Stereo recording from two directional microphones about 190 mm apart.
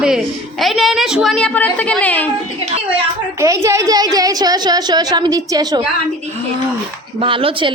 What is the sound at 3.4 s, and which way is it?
A woman's voice, 15° right (ahead or behind).